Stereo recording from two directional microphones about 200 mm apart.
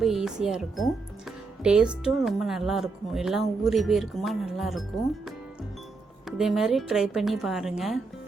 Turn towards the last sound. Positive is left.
turn(degrees=0)  # may be behind; listen again after turning